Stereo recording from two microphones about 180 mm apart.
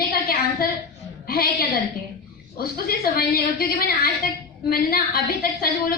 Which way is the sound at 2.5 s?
55° left (ahead or behind).